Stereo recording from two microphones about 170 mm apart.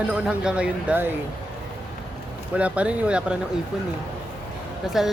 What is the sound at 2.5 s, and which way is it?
Speech, 10° right (ahead or behind).